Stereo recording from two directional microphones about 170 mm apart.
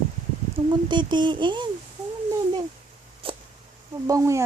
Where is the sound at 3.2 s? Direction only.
30° right (ahead or behind).